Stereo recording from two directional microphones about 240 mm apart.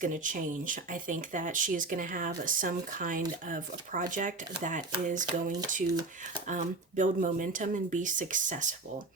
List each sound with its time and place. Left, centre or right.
0.0 s speech: right